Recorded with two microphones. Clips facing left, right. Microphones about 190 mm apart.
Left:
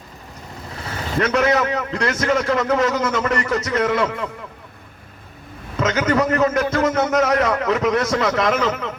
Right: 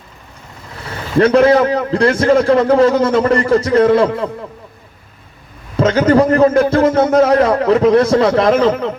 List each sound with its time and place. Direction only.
1.2 s a man's voice: 30° right (ahead or behind)
5.7 s a man's voice: 30° right (ahead or behind)